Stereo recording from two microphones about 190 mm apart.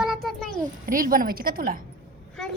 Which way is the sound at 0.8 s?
45° right (ahead or behind).